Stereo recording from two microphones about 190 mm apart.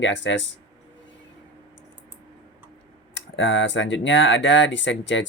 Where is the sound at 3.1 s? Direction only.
75° left (ahead or behind).